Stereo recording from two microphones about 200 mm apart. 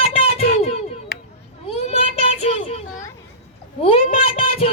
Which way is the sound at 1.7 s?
30° left (ahead or behind).